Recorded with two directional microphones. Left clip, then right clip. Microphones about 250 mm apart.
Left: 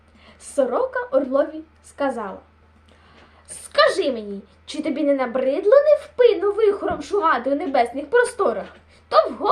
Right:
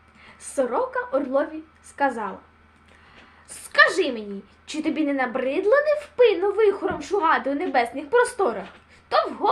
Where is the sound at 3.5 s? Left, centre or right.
Centre.